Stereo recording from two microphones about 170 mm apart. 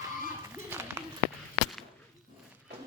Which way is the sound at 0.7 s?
15° right (ahead or behind).